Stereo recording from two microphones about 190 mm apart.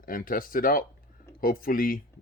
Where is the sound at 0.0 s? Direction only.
50° left (ahead or behind).